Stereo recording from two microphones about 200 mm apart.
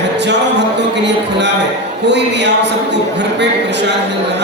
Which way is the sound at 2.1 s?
60° right (ahead or behind).